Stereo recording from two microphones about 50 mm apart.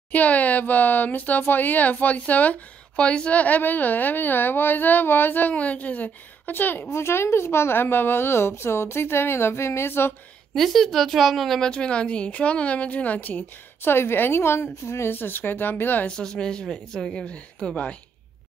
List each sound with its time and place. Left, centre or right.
0.1 s a woman's voice: left
3.0 s a woman's voice: left
6.9 s a woman's voice: left
10.5 s a woman's voice: centre
11.7 s a woman's voice: centre; by 15.1 s left
15.1 s a woman's voice: left
16.1 s speech: centre
17.6 s a woman's voice: left